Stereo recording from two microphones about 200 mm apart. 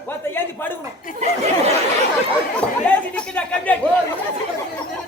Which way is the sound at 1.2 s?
35° right (ahead or behind).